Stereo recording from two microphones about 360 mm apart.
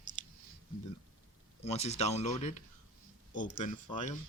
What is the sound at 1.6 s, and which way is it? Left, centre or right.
Speech, centre.